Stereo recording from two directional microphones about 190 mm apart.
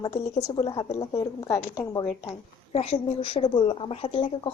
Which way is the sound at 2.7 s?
30° left (ahead or behind).